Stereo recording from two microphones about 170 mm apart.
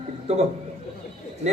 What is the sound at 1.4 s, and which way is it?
Speech, 40° right (ahead or behind).